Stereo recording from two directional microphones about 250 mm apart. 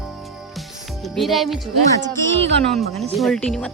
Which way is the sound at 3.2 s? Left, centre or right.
Centre.